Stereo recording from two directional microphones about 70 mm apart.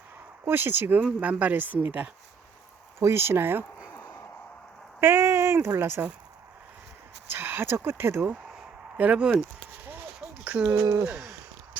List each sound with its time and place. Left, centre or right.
0.4 s speech: right
3.0 s speech: right
4.9 s speech: right
7.3 s speech: right
9.0 s speech: centre
10.4 s speech: centre
10.8 s speech: right